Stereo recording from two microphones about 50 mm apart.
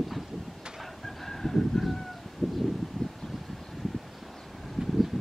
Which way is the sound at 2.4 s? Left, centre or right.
Centre.